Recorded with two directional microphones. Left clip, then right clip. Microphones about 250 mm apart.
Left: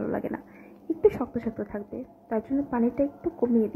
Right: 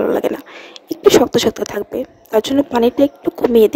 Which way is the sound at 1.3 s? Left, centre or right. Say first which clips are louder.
Right 17 dB; right.